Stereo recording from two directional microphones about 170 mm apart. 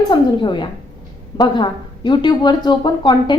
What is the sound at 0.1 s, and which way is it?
A woman's voice, 30° left (ahead or behind).